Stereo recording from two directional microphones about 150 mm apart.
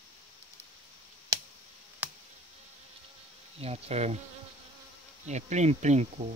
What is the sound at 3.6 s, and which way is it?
Speech, 45° right (ahead or behind).